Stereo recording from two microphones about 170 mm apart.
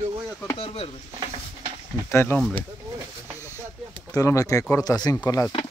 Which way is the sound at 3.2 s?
15° right (ahead or behind).